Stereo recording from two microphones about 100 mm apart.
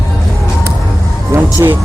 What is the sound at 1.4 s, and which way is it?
Music, 20° right (ahead or behind).